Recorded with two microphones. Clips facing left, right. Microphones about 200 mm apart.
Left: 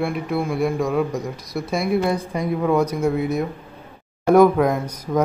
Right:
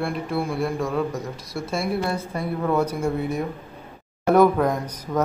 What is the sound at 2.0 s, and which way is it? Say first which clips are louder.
Speech: left 4 dB; 15° left (ahead or behind).